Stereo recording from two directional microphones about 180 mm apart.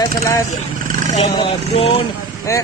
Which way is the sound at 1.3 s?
30° left (ahead or behind).